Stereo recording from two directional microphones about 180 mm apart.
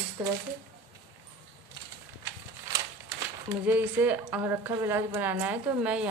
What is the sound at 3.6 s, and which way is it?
Speech, 10° right (ahead or behind).